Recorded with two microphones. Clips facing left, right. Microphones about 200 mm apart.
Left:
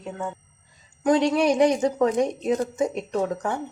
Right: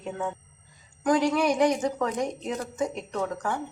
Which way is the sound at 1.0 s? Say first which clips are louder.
Left 3 dB; 30° left (ahead or behind).